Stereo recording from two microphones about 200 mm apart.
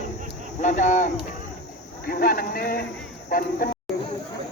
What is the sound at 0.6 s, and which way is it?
Speech, 35° left (ahead or behind).